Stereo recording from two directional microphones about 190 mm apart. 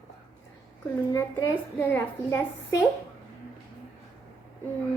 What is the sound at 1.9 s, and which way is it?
Speech, 10° left (ahead or behind).